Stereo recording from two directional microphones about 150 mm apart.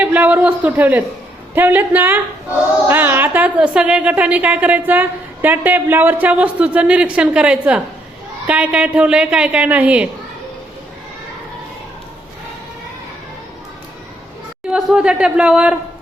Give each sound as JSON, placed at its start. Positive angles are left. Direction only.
{"t": 0.0, "sound": "a woman's voice", "side_deg": -10}
{"t": 14.7, "sound": "a woman's voice", "side_deg": -5}